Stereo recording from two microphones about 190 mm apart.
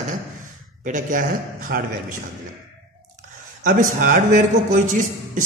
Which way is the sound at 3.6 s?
45° right (ahead or behind).